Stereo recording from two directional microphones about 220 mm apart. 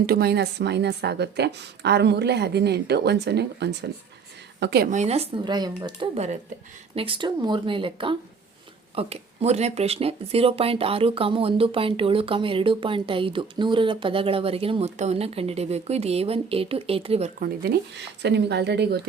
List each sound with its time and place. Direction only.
0.0 s a woman's voice: 45° right (ahead or behind)
17.6 s a woman's voice: 50° right (ahead or behind)